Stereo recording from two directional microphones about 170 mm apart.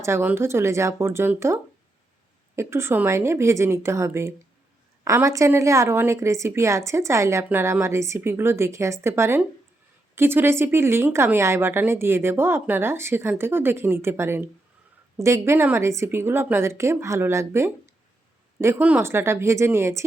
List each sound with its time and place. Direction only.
0.0 s a woman's voice: 15° right (ahead or behind)
2.6 s a woman's voice: 15° right (ahead or behind)